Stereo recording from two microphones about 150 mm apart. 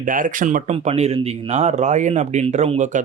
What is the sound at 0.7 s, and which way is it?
Speech, 45° right (ahead or behind).